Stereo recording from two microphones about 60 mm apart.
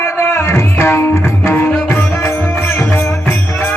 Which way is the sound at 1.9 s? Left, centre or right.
Left.